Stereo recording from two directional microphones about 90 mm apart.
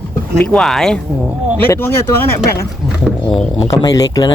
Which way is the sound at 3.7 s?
45° left (ahead or behind).